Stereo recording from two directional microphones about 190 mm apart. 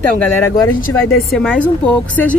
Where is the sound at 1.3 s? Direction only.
Centre (ahead or behind).